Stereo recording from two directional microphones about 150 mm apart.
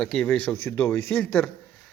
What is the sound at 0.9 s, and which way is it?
Speech, 5° left (ahead or behind).